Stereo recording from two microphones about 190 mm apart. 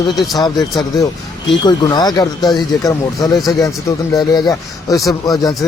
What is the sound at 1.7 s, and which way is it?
A man's voice, 20° left (ahead or behind).